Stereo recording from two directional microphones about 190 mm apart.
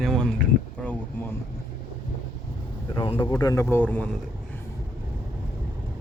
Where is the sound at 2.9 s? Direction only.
25° left (ahead or behind); by 4.1 s 10° left (ahead or behind).